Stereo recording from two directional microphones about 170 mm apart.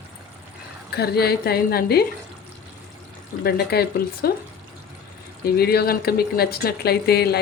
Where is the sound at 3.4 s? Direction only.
65° left (ahead or behind).